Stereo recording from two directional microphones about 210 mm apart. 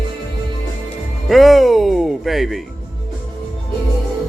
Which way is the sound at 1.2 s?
Centre (ahead or behind).